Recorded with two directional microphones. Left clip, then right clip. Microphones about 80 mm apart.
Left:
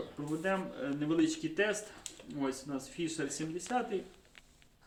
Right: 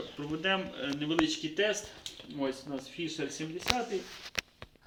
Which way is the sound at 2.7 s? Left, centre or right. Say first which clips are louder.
Right 1 dB; left.